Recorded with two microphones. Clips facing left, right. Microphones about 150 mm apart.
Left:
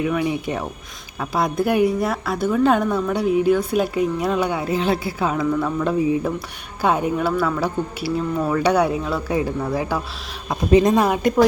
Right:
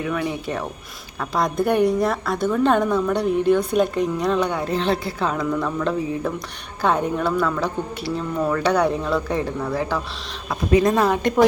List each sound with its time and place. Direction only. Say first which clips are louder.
0.0 s a woman's voice: left 3 dB; 15° left (ahead or behind)
10.5 s speech: left 2 dB; 25° left (ahead or behind)
10.9 s speech: left 1 dB; 10° left (ahead or behind)